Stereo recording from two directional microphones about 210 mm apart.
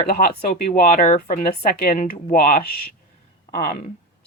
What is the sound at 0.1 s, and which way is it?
Speech, 40° left (ahead or behind).